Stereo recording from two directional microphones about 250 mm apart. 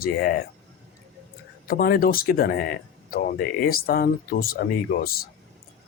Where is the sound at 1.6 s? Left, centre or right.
Left.